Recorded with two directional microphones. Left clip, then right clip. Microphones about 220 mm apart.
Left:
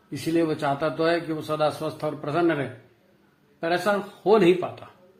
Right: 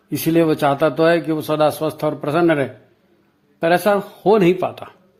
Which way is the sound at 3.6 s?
45° right (ahead or behind).